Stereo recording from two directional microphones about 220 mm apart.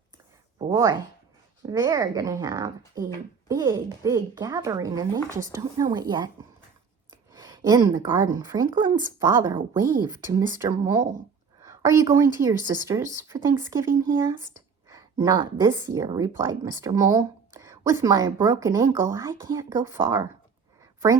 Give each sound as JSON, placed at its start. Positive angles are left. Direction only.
{"t": 0.7, "sound": "speech", "side_deg": -15}
{"t": 7.3, "sound": "a woman's voice", "side_deg": -20}